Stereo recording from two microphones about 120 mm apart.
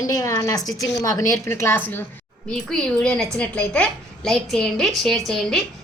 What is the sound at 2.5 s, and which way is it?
A woman's voice, 5° left (ahead or behind).